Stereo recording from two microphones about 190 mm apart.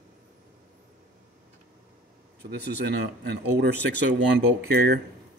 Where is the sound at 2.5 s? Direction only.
60° right (ahead or behind).